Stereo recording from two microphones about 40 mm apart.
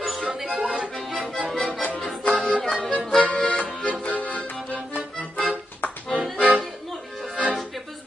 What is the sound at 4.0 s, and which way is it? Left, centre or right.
Music, left.